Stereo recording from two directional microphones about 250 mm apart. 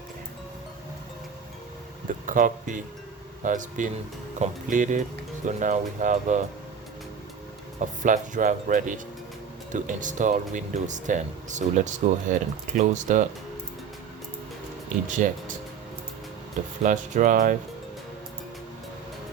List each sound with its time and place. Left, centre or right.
2.2 s speech: right
7.8 s speech: right
15.0 s speech: right
16.8 s speech: right